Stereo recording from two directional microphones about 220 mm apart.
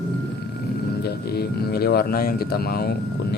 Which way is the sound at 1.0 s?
45° left (ahead or behind).